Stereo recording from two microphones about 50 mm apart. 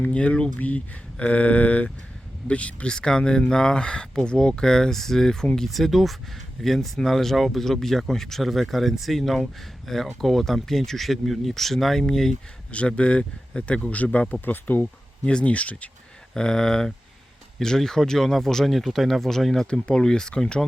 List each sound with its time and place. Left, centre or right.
0.1 s speech: left
2.9 s speech: centre
5.6 s speech: centre
12.7 s speech: left
14.4 s speech: left
15.3 s speech: left
16.3 s speech: centre